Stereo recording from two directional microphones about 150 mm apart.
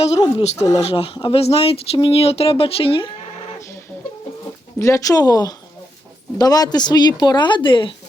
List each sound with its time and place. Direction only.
0.2 s speech: 35° left (ahead or behind)
4.8 s speech: 20° left (ahead or behind)